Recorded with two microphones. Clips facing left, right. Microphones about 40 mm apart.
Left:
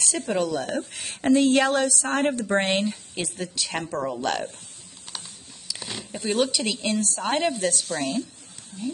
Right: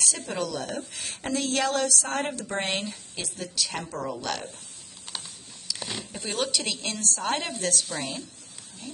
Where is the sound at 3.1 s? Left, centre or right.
Left.